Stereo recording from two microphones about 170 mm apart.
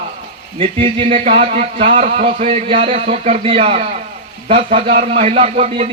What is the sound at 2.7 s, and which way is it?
A man's voice, 35° right (ahead or behind).